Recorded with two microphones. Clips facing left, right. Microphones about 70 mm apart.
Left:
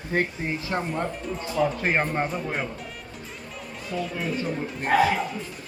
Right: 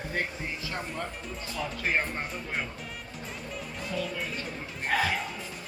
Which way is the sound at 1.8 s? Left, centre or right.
Left.